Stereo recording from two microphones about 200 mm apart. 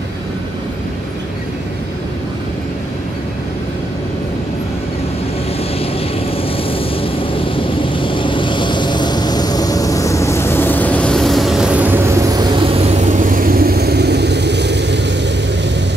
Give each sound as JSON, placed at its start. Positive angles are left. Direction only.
{"t": 6.5, "sound": "vehicle", "side_deg": 25}
{"t": 13.0, "sound": "vehicle", "side_deg": -40}